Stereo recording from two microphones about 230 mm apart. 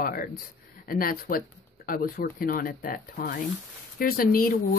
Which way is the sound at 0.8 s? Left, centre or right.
Left.